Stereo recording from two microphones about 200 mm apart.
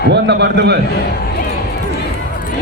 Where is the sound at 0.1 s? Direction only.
60° right (ahead or behind).